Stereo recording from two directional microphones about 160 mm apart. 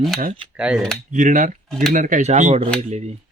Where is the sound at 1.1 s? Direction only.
50° right (ahead or behind).